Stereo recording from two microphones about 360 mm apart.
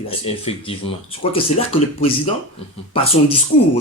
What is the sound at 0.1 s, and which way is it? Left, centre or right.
A man's voice, centre.